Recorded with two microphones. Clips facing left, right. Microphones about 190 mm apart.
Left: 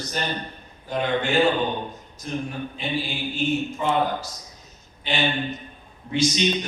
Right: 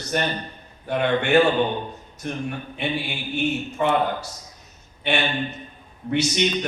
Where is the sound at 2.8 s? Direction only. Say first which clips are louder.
Right 1 dB; 70° right (ahead or behind).